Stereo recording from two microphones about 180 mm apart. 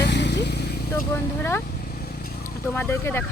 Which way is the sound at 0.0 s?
70° left (ahead or behind).